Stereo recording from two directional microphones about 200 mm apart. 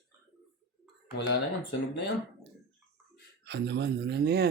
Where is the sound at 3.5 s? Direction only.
60° right (ahead or behind).